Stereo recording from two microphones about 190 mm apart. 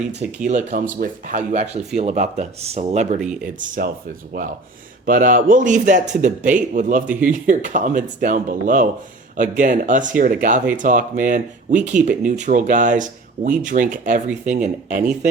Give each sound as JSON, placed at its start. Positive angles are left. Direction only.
{"t": 0.4, "sound": "speech", "side_deg": -40}
{"t": 5.0, "sound": "speech", "side_deg": -45}